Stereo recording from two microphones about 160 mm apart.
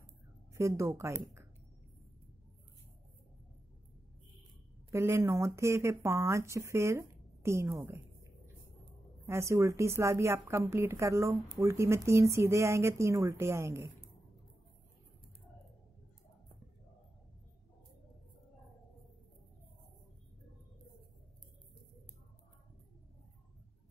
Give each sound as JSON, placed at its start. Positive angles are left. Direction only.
{"t": 0.6, "sound": "speech", "side_deg": -20}
{"t": 4.9, "sound": "speech", "side_deg": -15}